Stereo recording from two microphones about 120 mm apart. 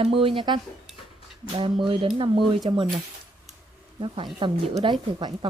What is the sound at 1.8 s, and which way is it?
Speech, 45° right (ahead or behind).